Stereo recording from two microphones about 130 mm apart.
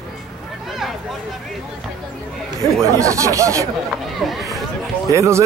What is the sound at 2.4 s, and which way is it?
Speech, 25° right (ahead or behind).